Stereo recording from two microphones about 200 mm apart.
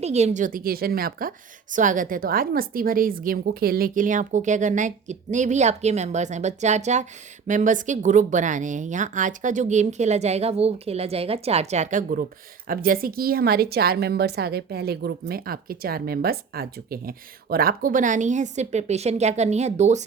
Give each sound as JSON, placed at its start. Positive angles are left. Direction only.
{"t": 0.0, "sound": "a woman's voice", "side_deg": -35}